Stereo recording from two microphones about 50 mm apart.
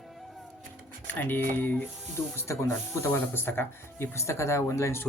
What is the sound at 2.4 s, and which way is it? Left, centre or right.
Speech, left.